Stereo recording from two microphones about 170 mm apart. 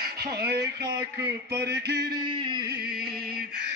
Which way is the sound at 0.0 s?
65° right (ahead or behind).